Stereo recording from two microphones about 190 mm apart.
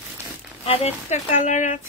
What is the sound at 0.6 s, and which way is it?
Speech, 30° left (ahead or behind).